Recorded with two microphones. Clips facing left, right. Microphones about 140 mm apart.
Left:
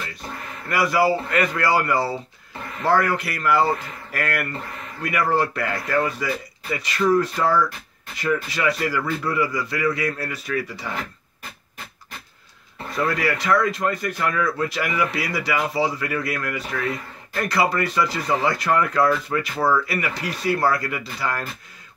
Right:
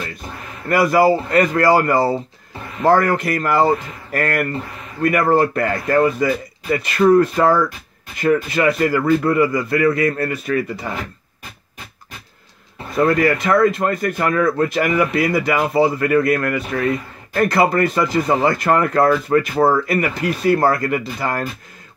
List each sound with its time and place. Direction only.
0.7 s speech: 45° right (ahead or behind)
12.9 s speech: 50° right (ahead or behind)